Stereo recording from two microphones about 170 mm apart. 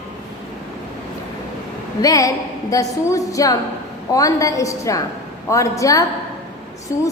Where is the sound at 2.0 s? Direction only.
20° left (ahead or behind).